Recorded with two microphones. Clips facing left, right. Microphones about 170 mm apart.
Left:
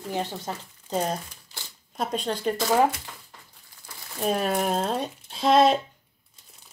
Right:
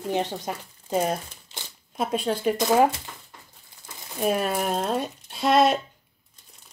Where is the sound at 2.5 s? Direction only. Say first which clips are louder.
Right 2 dB; 20° right (ahead or behind).